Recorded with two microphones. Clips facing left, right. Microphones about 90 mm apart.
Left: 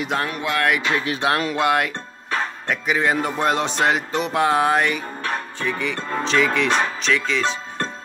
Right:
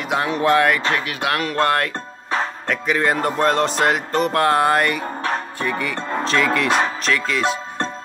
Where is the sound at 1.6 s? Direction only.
10° left (ahead or behind).